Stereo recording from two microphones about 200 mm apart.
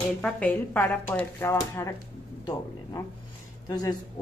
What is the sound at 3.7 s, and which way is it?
Speech, 20° left (ahead or behind).